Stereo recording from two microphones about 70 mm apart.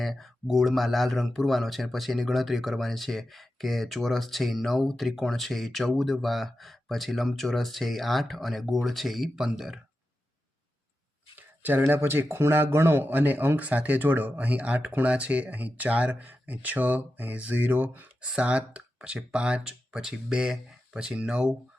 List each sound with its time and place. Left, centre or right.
0.0 s speech: centre
11.3 s a sound: right
11.9 s speech: right; by 21.5 s centre